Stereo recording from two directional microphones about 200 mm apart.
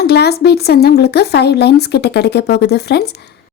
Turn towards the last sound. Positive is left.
turn(degrees=55)  # may be behind; listen again after turning